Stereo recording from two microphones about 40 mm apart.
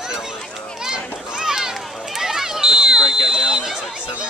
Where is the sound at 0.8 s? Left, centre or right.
Centre.